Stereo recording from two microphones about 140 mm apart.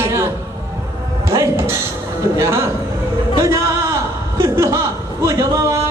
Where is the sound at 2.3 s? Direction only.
20° right (ahead or behind).